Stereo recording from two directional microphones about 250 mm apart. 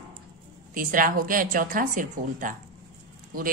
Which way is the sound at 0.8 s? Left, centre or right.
Right.